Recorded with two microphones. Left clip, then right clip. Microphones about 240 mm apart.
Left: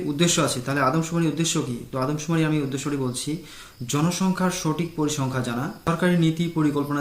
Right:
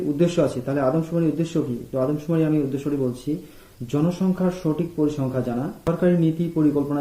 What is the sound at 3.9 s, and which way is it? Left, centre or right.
Speech, centre.